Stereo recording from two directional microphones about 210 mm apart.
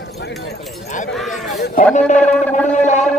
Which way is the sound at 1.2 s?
Centre (ahead or behind).